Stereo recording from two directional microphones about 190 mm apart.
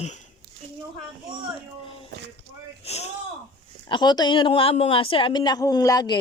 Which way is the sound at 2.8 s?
35° left (ahead or behind).